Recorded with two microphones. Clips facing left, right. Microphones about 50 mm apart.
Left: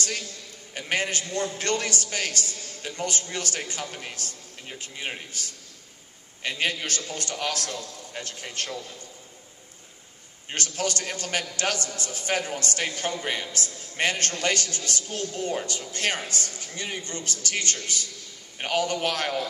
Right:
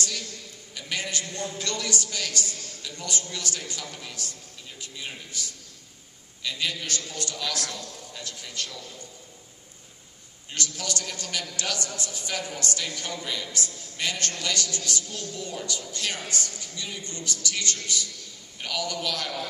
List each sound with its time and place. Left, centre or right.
0.7 s a man's voice: left
6.4 s a man's voice: left
10.5 s a man's voice: left